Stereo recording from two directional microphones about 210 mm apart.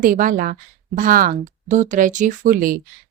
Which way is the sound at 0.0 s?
40° right (ahead or behind).